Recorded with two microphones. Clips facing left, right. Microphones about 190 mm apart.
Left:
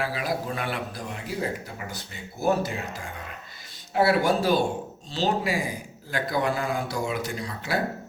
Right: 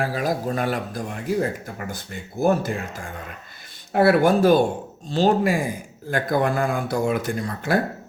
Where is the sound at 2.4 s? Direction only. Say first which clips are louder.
Right 4 dB; 50° right (ahead or behind).